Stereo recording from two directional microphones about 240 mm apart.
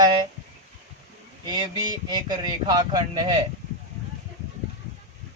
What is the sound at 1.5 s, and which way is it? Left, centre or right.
Speech, centre.